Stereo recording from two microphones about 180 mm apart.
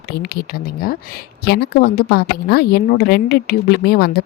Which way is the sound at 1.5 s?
60° left (ahead or behind).